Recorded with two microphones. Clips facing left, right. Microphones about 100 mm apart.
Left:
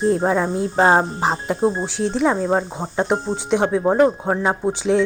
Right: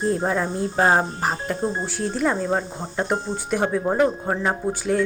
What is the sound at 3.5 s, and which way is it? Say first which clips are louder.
Speech: left 4 dB; 20° left (ahead or behind).